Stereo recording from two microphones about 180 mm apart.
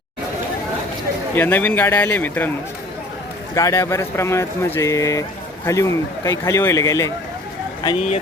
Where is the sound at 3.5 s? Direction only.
15° left (ahead or behind).